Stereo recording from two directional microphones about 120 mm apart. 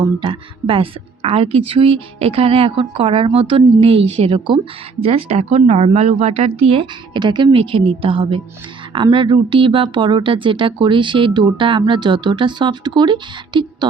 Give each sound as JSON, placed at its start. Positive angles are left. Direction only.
{"t": 0.0, "sound": "a woman's voice", "side_deg": -45}